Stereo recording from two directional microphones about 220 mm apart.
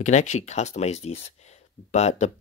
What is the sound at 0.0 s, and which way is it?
Speech, 30° left (ahead or behind).